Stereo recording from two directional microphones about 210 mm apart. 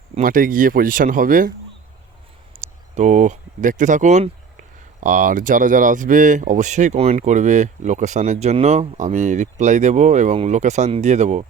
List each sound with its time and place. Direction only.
0.1 s speech: 40° right (ahead or behind)
2.6 s speech: 35° right (ahead or behind)